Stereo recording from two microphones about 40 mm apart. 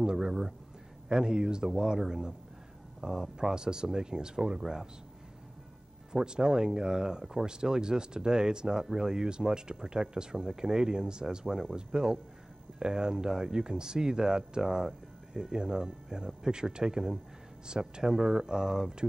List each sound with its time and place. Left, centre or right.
0.0 s a sound: centre
1.0 s speech: centre
6.1 s speech: right
11.4 s speech: centre
11.7 s speech: right